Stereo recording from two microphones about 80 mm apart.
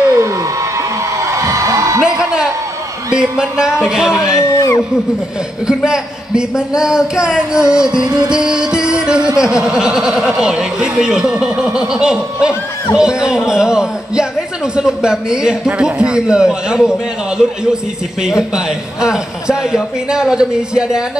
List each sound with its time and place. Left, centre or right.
0.2 s music: right
2.0 s music: centre
4.4 s a sound: left
5.9 s music: centre